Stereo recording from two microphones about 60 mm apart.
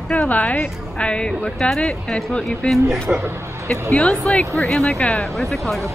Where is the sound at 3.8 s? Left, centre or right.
Centre.